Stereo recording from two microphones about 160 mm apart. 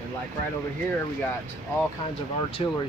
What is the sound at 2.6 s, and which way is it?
Speech, 35° left (ahead or behind).